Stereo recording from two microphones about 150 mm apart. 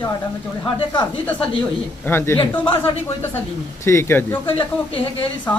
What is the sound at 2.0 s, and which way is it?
Speech, 15° left (ahead or behind).